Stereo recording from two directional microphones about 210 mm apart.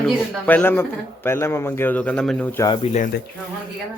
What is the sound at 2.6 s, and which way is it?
Speech, 30° left (ahead or behind).